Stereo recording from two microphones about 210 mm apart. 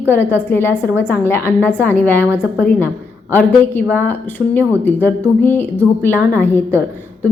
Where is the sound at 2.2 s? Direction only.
5° right (ahead or behind).